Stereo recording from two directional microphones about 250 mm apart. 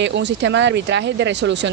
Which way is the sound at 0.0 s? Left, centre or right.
Right.